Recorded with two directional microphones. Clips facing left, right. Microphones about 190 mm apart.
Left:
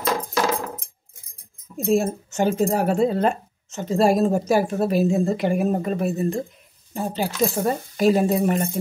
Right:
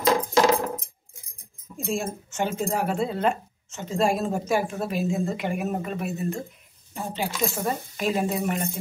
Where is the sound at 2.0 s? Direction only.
40° left (ahead or behind).